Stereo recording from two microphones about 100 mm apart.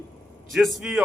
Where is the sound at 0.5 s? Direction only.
Centre (ahead or behind).